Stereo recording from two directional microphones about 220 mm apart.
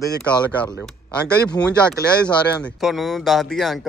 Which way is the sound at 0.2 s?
5° left (ahead or behind).